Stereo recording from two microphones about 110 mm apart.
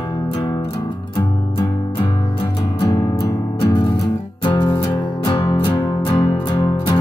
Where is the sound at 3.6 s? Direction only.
50° left (ahead or behind).